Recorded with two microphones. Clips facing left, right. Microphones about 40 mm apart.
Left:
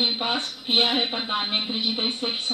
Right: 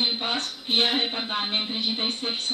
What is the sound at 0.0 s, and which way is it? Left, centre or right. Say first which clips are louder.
Speech: left 2 dB; centre.